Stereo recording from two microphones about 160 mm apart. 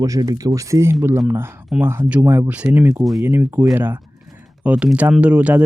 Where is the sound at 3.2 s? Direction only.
15° right (ahead or behind).